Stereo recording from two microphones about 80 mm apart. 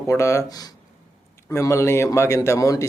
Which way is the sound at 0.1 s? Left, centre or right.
Left.